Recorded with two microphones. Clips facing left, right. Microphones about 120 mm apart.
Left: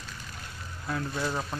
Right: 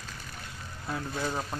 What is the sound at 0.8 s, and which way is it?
Speech, 20° right (ahead or behind).